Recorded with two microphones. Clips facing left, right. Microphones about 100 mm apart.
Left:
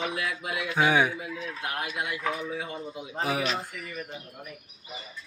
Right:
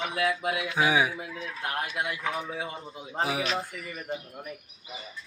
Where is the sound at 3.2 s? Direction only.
10° right (ahead or behind).